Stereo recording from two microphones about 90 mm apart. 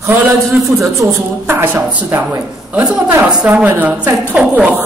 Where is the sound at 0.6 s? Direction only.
40° right (ahead or behind).